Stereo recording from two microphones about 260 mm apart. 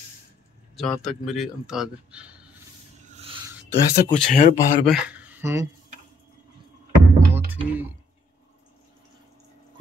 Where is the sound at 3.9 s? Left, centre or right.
Left.